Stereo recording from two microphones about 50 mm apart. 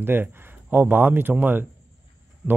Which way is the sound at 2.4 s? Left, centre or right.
Right.